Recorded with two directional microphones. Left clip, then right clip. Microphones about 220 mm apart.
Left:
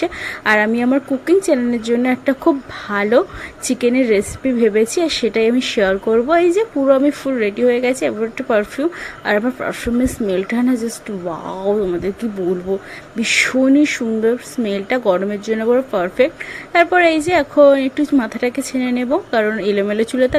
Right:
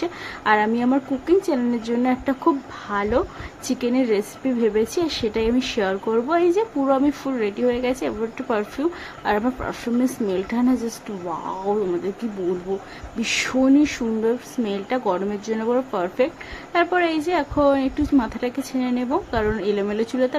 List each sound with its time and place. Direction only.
0.0 s a woman's voice: 15° left (ahead or behind)
13.1 s a woman's voice: 10° left (ahead or behind)